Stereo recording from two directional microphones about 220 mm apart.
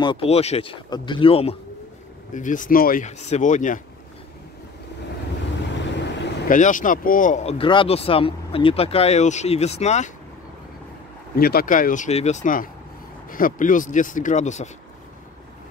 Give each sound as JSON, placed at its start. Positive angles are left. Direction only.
{"t": 0.0, "sound": "speech", "side_deg": 25}
{"t": 6.5, "sound": "speech", "side_deg": 35}
{"t": 11.3, "sound": "speech", "side_deg": 45}